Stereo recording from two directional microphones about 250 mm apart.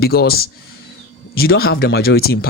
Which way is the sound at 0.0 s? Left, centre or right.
Left.